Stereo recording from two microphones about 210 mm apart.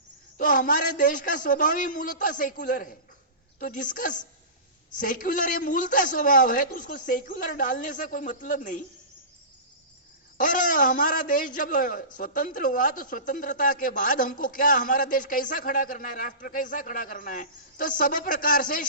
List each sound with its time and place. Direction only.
0.3 s a man's voice: 40° left (ahead or behind)
10.3 s a man's voice: 40° left (ahead or behind)